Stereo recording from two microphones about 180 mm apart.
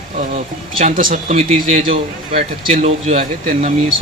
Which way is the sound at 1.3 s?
35° right (ahead or behind).